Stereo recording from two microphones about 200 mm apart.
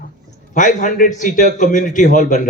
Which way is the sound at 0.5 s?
40° left (ahead or behind).